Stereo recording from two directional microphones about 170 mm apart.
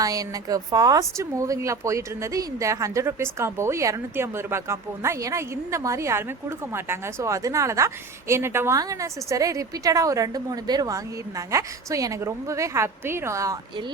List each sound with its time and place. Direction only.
0.0 s a woman's voice: 20° right (ahead or behind)